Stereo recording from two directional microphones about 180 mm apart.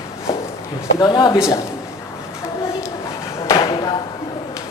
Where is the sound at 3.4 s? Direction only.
25° left (ahead or behind).